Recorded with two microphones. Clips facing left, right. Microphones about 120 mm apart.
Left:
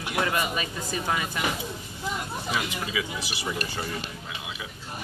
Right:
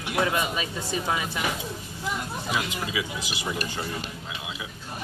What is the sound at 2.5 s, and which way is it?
Speech, 10° right (ahead or behind).